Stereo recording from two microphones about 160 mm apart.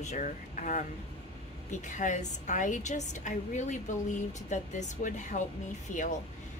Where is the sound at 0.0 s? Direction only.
50° left (ahead or behind).